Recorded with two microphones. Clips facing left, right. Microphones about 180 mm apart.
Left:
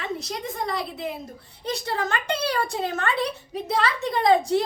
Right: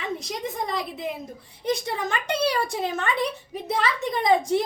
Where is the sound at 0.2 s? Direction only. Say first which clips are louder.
Even; 15° right (ahead or behind).